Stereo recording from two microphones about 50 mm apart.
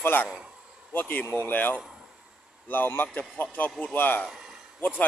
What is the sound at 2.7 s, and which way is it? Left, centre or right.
A man's voice, left.